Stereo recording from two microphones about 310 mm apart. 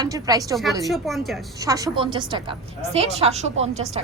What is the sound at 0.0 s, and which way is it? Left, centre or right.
Speech, centre.